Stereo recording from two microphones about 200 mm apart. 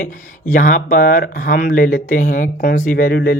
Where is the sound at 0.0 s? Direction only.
40° left (ahead or behind).